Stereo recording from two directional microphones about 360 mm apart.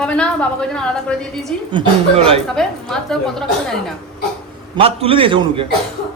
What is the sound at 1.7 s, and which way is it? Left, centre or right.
Speech, centre.